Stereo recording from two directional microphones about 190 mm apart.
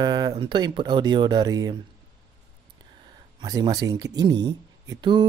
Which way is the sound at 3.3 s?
20° right (ahead or behind).